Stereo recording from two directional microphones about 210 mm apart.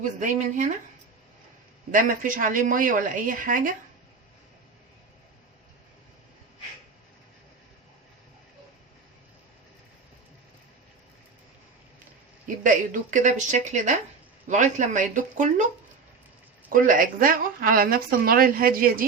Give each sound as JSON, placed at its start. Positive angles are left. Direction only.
{"t": 0.0, "sound": "a woman's voice", "side_deg": -35}
{"t": 1.9, "sound": "a woman's voice", "side_deg": -40}
{"t": 12.6, "sound": "a woman's voice", "side_deg": -40}
{"t": 16.6, "sound": "a woman's voice", "side_deg": -40}